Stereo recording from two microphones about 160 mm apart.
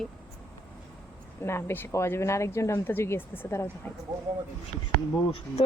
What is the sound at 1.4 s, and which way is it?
Speech, 15° left (ahead or behind).